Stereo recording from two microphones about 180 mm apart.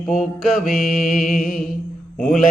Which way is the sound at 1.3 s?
45° left (ahead or behind).